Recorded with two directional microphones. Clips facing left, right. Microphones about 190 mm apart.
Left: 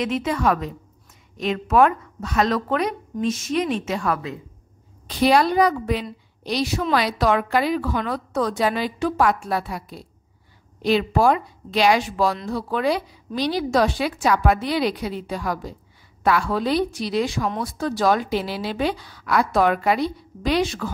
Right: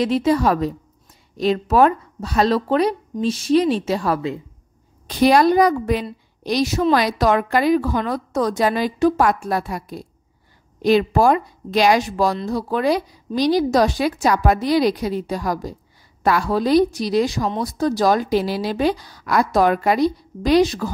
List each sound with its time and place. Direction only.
0.0 s a woman's voice: 35° right (ahead or behind)
5.0 s a woman's voice: 45° right (ahead or behind)